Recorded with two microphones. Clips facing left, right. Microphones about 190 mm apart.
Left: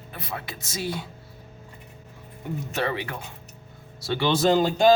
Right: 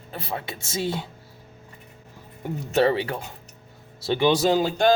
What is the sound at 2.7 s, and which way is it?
Speech, 30° right (ahead or behind).